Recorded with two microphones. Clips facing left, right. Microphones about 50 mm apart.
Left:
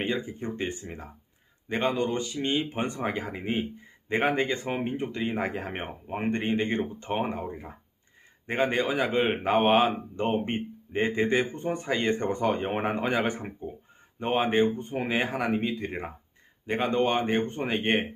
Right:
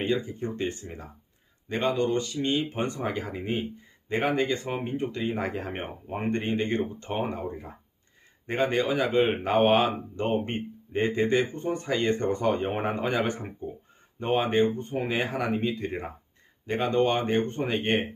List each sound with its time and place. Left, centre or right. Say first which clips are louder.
0.0 s a man's voice: right 2 dB; centre